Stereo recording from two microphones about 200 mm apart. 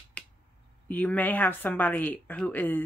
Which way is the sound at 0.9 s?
10° left (ahead or behind).